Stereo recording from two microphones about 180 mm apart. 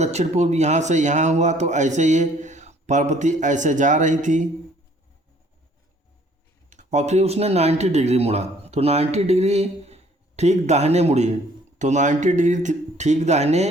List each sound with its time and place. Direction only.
0.0 s a man's voice: 40° right (ahead or behind)
6.7 s a man's voice: 40° right (ahead or behind)